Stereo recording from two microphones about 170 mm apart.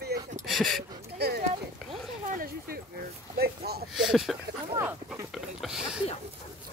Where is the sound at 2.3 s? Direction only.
55° right (ahead or behind).